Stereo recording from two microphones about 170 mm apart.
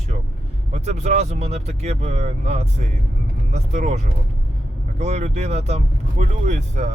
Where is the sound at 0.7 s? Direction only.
40° right (ahead or behind).